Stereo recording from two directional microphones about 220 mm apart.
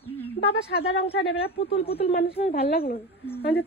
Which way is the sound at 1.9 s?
25° left (ahead or behind).